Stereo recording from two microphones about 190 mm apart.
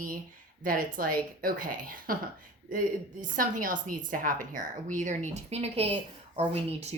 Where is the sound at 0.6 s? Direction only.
45° right (ahead or behind).